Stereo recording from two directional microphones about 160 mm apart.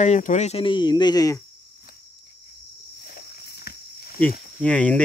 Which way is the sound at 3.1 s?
70° left (ahead or behind).